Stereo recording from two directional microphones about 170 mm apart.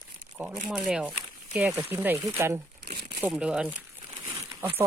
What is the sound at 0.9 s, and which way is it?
Speech, 5° right (ahead or behind).